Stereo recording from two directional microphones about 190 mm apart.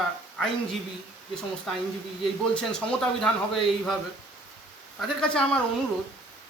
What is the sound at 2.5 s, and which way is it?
A man's voice, 5° left (ahead or behind).